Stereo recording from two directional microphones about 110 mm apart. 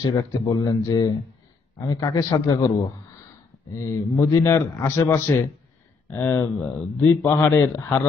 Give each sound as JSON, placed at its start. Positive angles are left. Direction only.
{"t": 0.0, "sound": "speech", "side_deg": 40}
{"t": 3.7, "sound": "a man's voice", "side_deg": 30}